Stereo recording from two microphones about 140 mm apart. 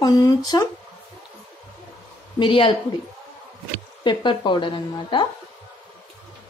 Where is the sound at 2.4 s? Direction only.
35° left (ahead or behind).